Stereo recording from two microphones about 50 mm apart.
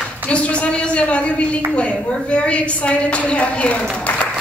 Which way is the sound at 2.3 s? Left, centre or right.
Left.